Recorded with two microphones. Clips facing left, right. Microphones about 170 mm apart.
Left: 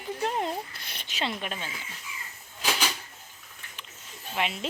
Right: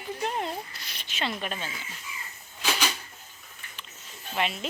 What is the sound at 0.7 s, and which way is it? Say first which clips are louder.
Speech: left 1 dB; 55° left (ahead or behind).